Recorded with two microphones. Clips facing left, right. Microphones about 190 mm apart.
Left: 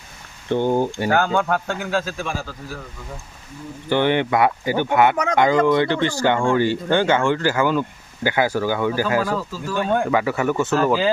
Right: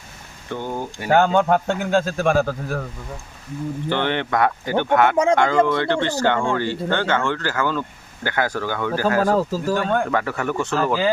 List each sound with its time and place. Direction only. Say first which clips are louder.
0.5 s speech: left 8 dB; 30° left (ahead or behind)
1.1 s a man's voice: right 6 dB; 25° right (ahead or behind)
2.0 s a man's voice: right 9 dB; 50° right (ahead or behind)
3.8 s speech: left 5 dB; 10° left (ahead or behind)
5.1 s a man's voice: right 6 dB; 30° right (ahead or behind)
5.4 s speech: left 2 dB; 15° left (ahead or behind)
9.2 s speech: right 6 dB; 45° right (ahead or behind)
9.8 s speech: left 2 dB; 15° left (ahead or behind)